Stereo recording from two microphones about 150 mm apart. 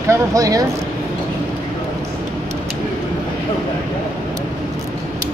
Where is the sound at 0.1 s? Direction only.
25° right (ahead or behind).